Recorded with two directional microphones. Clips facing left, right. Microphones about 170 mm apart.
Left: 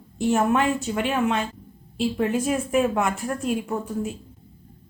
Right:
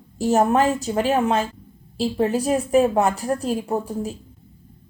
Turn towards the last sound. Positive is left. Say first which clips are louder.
# right 2 dB
turn(degrees=-35)  # may be behind; listen again after turning